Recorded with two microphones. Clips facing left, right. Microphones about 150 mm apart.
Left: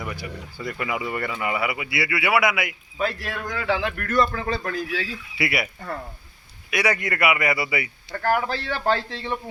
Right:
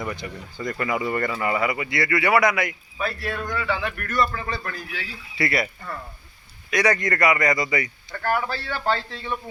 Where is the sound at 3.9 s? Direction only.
80° left.